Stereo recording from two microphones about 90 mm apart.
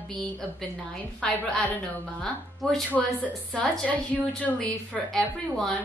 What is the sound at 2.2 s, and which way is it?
Speech, 5° left (ahead or behind).